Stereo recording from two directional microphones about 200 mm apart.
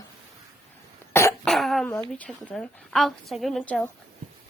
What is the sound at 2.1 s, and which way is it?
A woman's voice, 5° left (ahead or behind).